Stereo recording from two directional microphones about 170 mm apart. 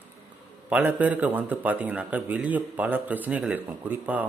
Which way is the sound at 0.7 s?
10° right (ahead or behind).